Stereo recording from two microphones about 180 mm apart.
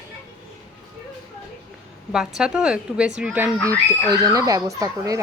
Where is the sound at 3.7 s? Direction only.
20° right (ahead or behind).